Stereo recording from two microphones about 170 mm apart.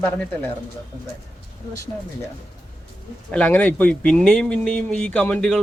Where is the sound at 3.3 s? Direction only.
10° left (ahead or behind).